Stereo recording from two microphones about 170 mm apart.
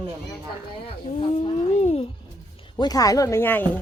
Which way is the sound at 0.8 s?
35° left (ahead or behind).